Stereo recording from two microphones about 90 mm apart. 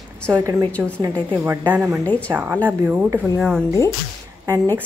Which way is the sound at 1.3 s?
25° right (ahead or behind).